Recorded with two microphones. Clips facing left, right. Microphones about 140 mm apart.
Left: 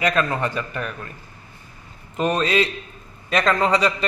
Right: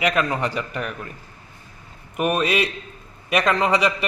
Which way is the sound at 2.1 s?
10° right (ahead or behind).